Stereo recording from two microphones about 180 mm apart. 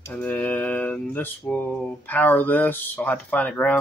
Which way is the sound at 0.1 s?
10° left (ahead or behind).